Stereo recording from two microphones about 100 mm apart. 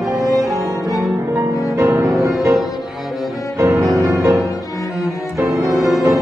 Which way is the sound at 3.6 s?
35° right (ahead or behind).